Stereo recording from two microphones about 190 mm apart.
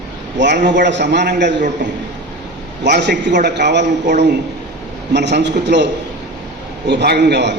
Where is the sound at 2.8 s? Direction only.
65° right (ahead or behind).